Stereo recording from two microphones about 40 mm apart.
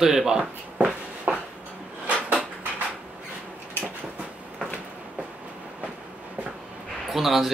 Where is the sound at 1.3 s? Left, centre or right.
Centre.